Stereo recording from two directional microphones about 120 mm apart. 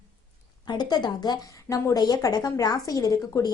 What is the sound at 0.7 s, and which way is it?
A woman's voice, 35° left (ahead or behind).